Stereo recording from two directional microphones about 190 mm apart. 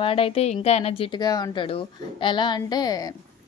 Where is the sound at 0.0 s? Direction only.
30° left (ahead or behind).